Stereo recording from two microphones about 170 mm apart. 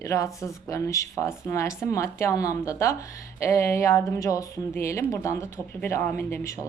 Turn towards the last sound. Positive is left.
turn(degrees=15)  # may be behind; listen again after turning